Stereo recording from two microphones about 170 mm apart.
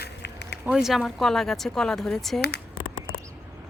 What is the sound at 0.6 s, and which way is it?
Speech, 5° right (ahead or behind).